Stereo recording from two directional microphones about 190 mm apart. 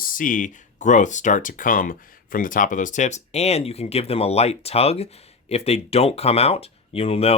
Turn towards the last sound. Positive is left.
turn(degrees=30)  # may be behind; listen again after turning